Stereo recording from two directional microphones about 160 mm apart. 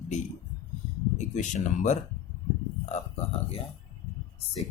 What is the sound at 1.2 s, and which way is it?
Speech, 50° left (ahead or behind).